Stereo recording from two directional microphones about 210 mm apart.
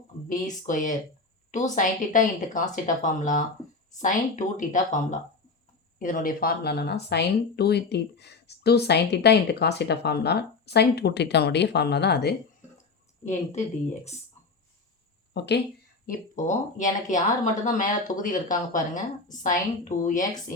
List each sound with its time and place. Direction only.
0.3 s speech: 40° left (ahead or behind)
6.0 s speech: 40° left (ahead or behind)
15.3 s speech: 55° left (ahead or behind)
16.0 s speech: 35° left (ahead or behind)